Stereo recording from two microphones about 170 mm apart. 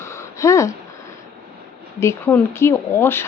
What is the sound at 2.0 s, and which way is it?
A woman's voice, 15° left (ahead or behind).